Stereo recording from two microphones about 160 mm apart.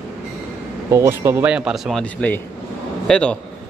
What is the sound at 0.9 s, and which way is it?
A man's voice, 15° right (ahead or behind).